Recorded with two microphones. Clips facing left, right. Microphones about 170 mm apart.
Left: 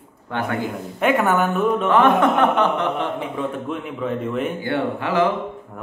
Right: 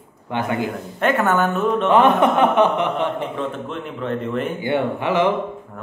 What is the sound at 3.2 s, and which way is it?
A man's voice, 5° left (ahead or behind).